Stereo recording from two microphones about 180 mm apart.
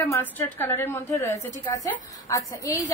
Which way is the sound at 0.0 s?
15° left (ahead or behind).